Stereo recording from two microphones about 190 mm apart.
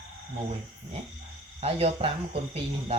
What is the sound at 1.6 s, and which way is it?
Speech, 30° right (ahead or behind).